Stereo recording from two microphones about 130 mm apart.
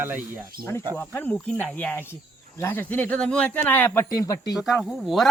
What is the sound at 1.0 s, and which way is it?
Speech, 15° left (ahead or behind).